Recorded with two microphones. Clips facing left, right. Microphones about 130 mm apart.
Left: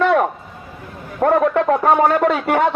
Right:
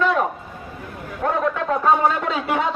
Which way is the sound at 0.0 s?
65° left (ahead or behind).